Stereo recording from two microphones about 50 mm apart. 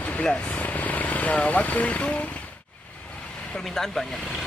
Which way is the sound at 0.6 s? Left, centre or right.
Left.